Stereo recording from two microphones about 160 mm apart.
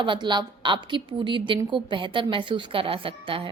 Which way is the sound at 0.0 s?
30° right (ahead or behind).